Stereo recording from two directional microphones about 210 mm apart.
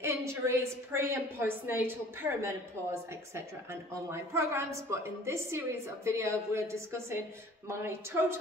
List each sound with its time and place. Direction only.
0.0 s a woman's voice: 15° right (ahead or behind)